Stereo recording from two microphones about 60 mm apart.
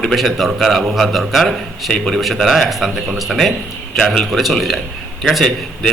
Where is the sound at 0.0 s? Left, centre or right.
Centre.